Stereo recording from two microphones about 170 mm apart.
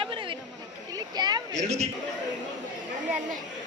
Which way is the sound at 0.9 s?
25° right (ahead or behind).